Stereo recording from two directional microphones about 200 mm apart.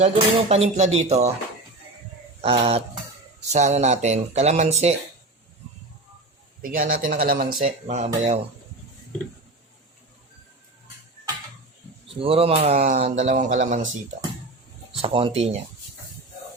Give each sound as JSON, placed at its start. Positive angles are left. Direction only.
{"t": 0.1, "sound": "speech", "side_deg": -30}
{"t": 2.4, "sound": "a sound", "side_deg": -30}
{"t": 3.5, "sound": "speech", "side_deg": -35}
{"t": 6.6, "sound": "speech", "side_deg": -40}
{"t": 7.6, "sound": "speech", "side_deg": -35}
{"t": 12.2, "sound": "speech", "side_deg": -30}
{"t": 15.0, "sound": "a sound", "side_deg": -25}